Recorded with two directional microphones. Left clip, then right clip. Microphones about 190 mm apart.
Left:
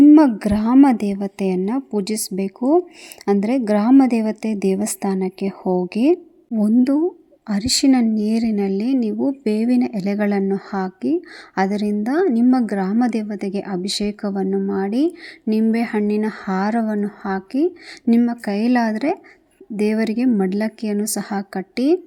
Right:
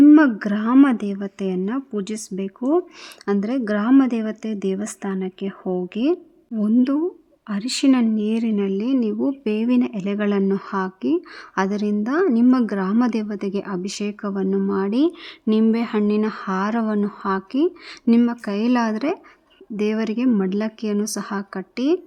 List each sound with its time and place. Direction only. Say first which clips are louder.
0.3 s speech: left 2 dB; 10° left (ahead or behind)
2.6 s speech: left 4 dB; 5° right (ahead or behind)
3.4 s speech: left 4 dB; 15° left (ahead or behind)